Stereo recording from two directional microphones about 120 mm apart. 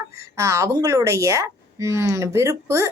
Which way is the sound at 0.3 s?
25° right (ahead or behind).